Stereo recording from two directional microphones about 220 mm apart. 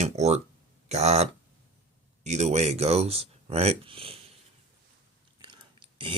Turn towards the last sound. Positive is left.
turn(degrees=-25)  # may be behind; listen again after turning